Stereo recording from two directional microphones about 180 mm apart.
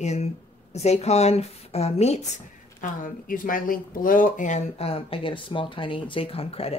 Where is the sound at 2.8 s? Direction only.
50° left (ahead or behind); by 6.8 s 35° left (ahead or behind).